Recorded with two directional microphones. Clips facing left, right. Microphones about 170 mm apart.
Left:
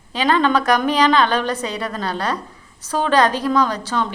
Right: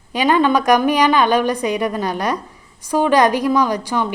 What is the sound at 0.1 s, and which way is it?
A woman's voice, 15° right (ahead or behind).